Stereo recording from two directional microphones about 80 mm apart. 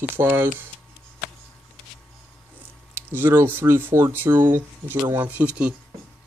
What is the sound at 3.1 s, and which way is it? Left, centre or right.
Filing, right.